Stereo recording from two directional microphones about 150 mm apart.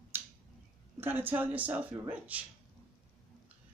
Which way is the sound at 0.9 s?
15° right (ahead or behind).